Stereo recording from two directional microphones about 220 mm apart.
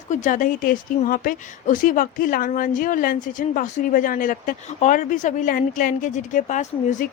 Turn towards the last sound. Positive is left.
turn(degrees=35)  # may be behind; listen again after turning